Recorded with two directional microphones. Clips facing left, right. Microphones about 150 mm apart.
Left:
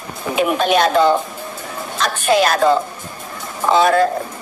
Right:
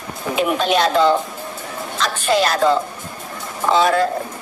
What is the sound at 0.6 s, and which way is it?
Speech, 50° left (ahead or behind).